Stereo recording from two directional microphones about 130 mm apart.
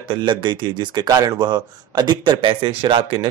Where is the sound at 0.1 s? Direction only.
35° right (ahead or behind).